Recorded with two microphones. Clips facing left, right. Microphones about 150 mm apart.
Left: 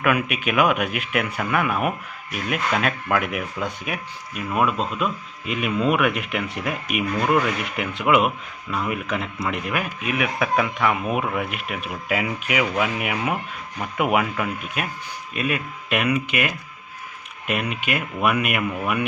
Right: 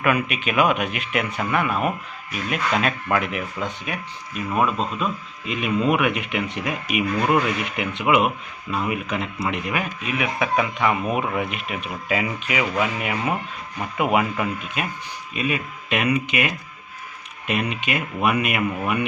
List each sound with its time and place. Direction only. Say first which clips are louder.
0.0 s speech: even; 5° left (ahead or behind)